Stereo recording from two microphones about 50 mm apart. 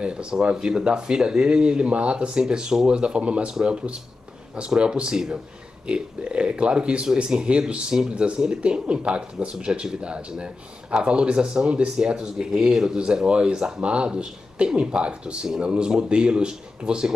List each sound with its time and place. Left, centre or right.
0.0 s speech: centre